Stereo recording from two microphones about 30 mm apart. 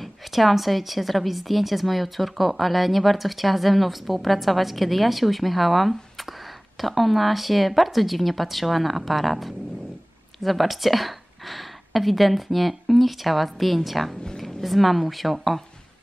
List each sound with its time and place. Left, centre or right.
0.0 s a woman's voice: centre